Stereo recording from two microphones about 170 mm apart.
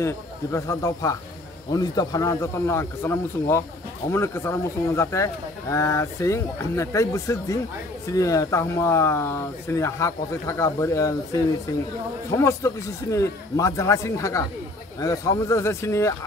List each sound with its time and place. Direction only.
0.0 s speech: 15° left (ahead or behind)